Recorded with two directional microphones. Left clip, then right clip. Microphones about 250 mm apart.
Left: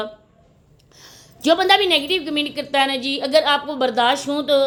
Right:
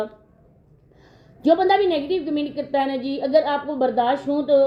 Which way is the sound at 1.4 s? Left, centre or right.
Centre.